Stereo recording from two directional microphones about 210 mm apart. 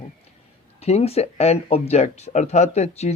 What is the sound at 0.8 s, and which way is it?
Speech, 30° left (ahead or behind).